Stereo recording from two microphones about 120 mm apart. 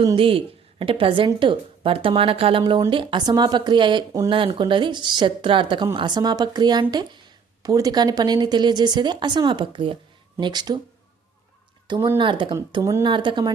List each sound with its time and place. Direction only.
0.2 s a woman's voice: 50° right (ahead or behind)
12.0 s a woman's voice: 45° right (ahead or behind)